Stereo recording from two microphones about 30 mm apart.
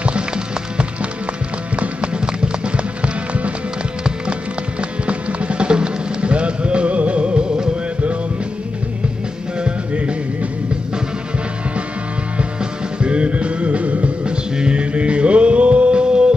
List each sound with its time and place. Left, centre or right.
1.8 s music: right
5.0 s music: right
9.6 s music: right
13.0 s music: right
14.2 s music: right